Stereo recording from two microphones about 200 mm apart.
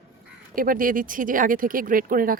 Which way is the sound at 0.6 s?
45° right (ahead or behind).